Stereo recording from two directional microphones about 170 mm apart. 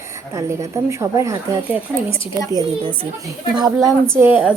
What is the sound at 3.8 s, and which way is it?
Speech, centre (ahead or behind).